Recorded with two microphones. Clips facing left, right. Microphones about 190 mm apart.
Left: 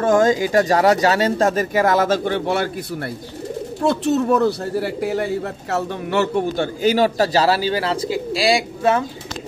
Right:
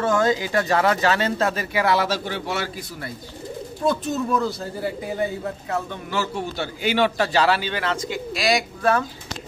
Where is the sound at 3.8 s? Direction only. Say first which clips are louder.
Left 5 dB; 75° left (ahead or behind).